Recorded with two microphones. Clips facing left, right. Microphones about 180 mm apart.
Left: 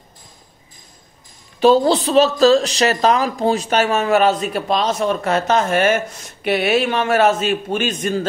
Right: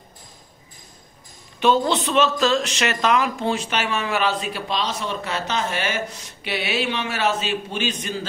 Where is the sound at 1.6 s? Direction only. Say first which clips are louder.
Left 6 dB; 35° left (ahead or behind).